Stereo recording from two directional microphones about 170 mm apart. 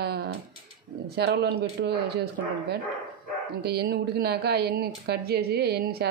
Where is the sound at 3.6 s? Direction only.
70° right (ahead or behind).